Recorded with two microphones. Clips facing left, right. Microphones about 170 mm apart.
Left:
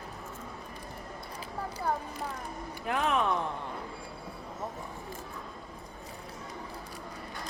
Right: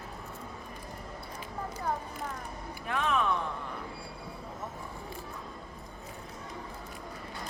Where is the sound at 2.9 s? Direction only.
35° left (ahead or behind).